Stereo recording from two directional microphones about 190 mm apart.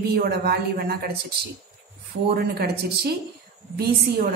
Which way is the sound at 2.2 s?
55° right (ahead or behind).